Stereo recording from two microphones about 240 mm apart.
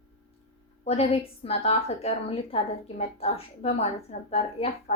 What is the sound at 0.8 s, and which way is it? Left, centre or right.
A woman's voice, left.